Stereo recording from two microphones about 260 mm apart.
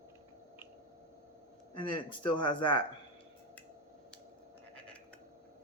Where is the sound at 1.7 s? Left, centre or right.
Centre.